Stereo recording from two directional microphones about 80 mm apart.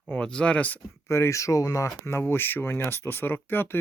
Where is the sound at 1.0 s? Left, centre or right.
Left.